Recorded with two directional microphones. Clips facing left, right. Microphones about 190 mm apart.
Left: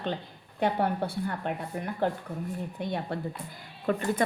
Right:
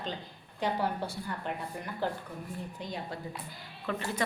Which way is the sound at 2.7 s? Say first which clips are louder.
Left 8 dB; 60° left (ahead or behind).